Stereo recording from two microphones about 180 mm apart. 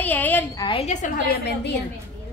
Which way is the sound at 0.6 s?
30° left (ahead or behind).